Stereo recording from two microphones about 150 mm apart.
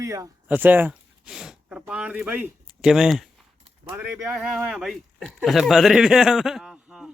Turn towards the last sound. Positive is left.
turn(degrees=-5)  # may be behind; listen again after turning